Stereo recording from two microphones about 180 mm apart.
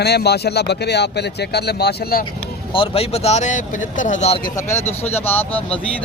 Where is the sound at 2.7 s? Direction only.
30° left (ahead or behind).